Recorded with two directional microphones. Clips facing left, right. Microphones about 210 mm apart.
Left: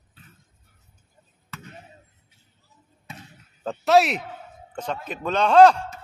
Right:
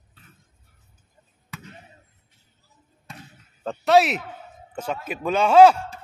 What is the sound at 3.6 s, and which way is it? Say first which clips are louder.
A man's voice: right 1 dB; centre (ahead or behind).